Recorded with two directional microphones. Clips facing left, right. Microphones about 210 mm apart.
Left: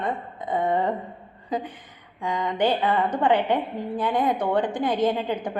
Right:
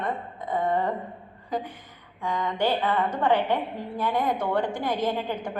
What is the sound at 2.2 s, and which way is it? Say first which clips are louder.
A woman's voice: left 2 dB; 15° left (ahead or behind).